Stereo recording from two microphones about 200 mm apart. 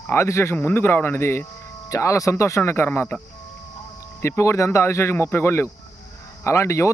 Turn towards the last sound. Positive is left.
turn(degrees=15)  # may be behind; listen again after turning